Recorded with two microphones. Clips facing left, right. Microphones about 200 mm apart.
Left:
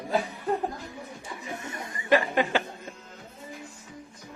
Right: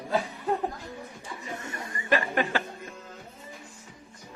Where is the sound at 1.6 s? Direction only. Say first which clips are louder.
Even; 20° left (ahead or behind).